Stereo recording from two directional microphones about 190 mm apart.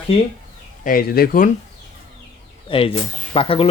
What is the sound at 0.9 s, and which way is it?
Speech, 50° left (ahead or behind).